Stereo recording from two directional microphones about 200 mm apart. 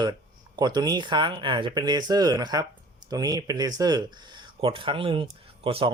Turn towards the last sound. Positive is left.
turn(degrees=-25)  # may be behind; listen again after turning